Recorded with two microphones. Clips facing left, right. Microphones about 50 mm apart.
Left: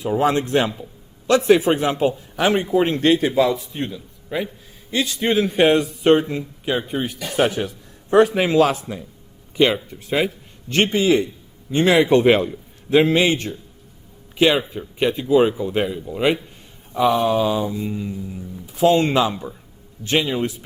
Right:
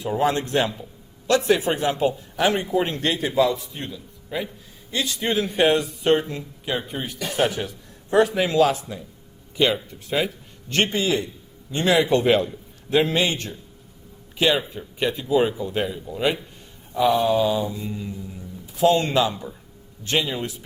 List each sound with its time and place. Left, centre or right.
0.0 s speech: left
4.9 s speech: left
6.3 s speech: left
8.1 s speech: left
16.1 s speech: left
16.9 s a sound: left
17.2 s speech: left